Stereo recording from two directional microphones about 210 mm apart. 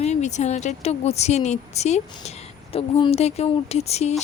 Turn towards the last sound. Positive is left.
turn(degrees=30)  # may be behind; listen again after turning